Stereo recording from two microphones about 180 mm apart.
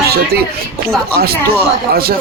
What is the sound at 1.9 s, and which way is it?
Speech, 55° right (ahead or behind).